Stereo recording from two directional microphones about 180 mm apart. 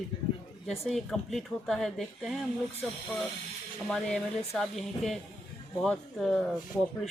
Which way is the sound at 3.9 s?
5° left (ahead or behind).